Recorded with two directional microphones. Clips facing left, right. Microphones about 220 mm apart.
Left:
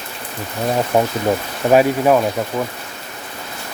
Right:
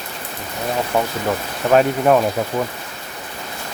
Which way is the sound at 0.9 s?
35° left (ahead or behind).